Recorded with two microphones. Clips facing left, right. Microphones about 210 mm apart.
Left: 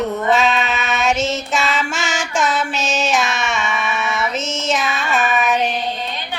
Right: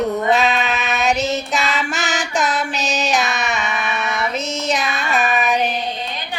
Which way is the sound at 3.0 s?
Centre (ahead or behind).